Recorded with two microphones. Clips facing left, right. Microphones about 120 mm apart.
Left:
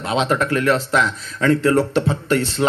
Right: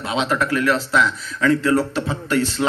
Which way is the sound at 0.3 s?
45° left (ahead or behind).